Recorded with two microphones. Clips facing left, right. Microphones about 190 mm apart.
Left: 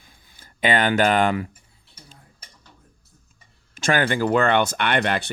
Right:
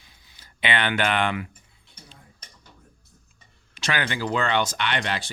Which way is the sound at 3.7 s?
45° left (ahead or behind).